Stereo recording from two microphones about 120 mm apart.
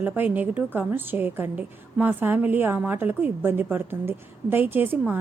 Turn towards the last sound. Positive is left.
turn(degrees=-15)  # may be behind; listen again after turning